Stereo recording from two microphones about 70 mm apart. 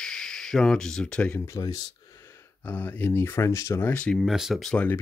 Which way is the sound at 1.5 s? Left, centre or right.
Left.